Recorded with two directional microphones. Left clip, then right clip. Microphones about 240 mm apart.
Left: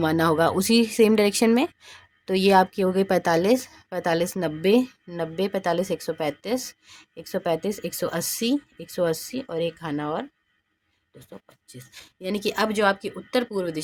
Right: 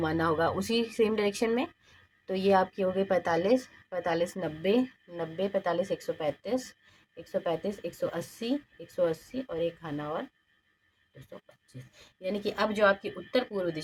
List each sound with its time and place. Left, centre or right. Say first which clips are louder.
0.0 s speech: left 7 dB; left